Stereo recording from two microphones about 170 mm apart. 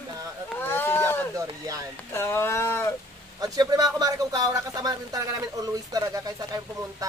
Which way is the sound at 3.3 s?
20° right (ahead or behind).